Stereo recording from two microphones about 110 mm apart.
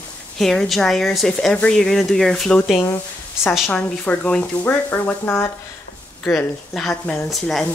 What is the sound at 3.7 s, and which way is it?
Speech, 10° left (ahead or behind).